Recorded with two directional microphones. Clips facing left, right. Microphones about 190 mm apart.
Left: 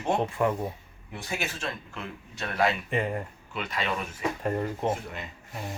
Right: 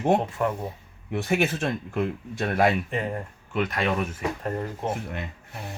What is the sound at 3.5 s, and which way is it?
Speech, 50° right (ahead or behind).